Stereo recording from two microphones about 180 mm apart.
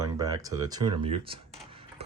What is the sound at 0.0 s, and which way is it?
Speech, 20° right (ahead or behind).